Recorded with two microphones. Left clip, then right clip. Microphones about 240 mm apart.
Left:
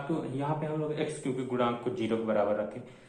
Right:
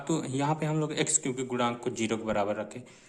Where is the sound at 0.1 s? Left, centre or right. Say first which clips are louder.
Right 4 dB; right.